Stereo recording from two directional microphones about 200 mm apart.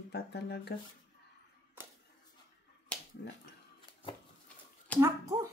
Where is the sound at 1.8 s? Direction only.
10° right (ahead or behind).